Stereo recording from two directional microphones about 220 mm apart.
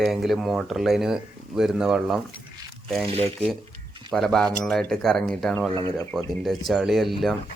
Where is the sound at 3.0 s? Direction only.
25° right (ahead or behind).